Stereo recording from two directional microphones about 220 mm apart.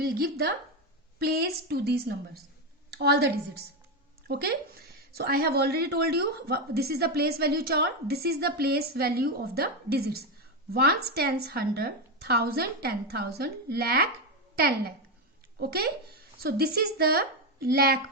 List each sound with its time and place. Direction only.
0.0 s a woman's voice: 45° right (ahead or behind)